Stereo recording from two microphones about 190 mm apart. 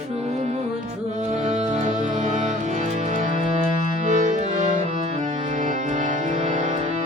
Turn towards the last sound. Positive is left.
turn(degrees=-40)  # may be behind; listen again after turning